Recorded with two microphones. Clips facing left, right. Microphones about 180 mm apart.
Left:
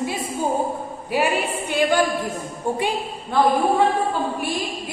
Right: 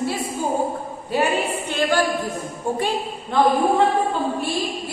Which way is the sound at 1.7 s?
15° left (ahead or behind).